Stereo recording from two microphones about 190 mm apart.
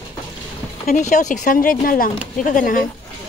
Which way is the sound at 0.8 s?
40° left (ahead or behind).